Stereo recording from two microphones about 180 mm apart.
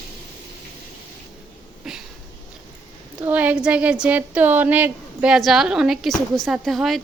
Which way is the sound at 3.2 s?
10° right (ahead or behind).